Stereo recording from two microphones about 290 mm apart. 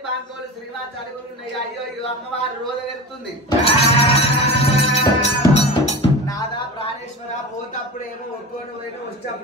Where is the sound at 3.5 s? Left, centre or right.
Centre.